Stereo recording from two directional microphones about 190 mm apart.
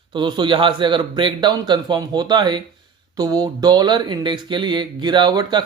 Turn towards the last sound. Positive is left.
turn(degrees=-25)  # may be behind; listen again after turning